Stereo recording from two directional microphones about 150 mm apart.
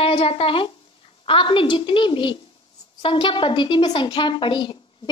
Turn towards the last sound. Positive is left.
turn(degrees=30)  # may be behind; listen again after turning